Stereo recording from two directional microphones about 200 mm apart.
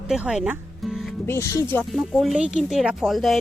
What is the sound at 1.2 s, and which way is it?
Speech, 15° left (ahead or behind).